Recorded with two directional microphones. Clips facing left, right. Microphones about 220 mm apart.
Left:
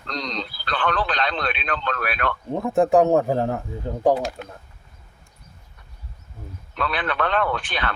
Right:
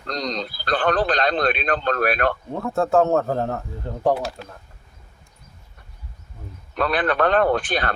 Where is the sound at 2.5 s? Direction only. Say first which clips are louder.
Left 3 dB; 15° left (ahead or behind).